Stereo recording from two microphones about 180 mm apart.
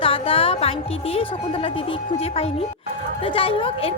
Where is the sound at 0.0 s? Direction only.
30° left (ahead or behind).